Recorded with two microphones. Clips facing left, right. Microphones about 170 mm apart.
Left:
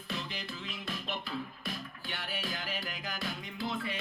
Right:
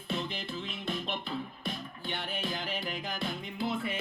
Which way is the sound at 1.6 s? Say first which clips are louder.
Right 3 dB; 20° right (ahead or behind).